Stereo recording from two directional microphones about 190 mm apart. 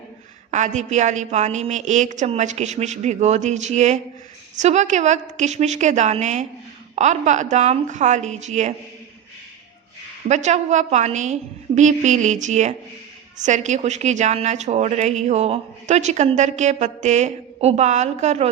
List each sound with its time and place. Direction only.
0.5 s speech: 40° right (ahead or behind)
10.2 s speech: 35° right (ahead or behind)